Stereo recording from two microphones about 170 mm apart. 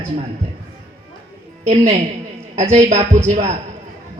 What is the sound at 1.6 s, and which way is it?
A woman's voice, 40° right (ahead or behind).